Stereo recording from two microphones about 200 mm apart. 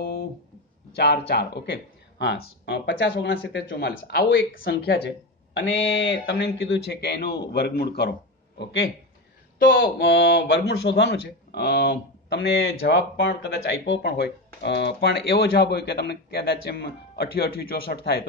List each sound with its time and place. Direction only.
0.9 s speech: 55° left (ahead or behind)
5.6 s speech: 65° left (ahead or behind)
9.7 s speech: 50° left (ahead or behind)